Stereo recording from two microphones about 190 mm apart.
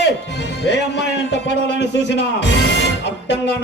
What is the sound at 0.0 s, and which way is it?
Speech, 60° left (ahead or behind).